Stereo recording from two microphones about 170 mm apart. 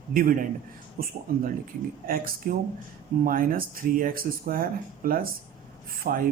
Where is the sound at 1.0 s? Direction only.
60° right (ahead or behind).